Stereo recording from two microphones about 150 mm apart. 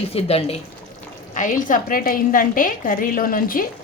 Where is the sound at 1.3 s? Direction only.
60° left (ahead or behind).